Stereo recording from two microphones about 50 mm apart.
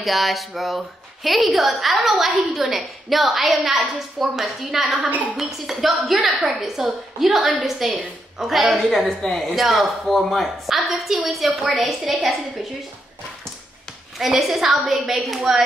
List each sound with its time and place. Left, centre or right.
0.0 s a woman's voice: centre
5.1 s speech: right
5.4 s a woman's voice: centre
14.1 s a woman's voice: centre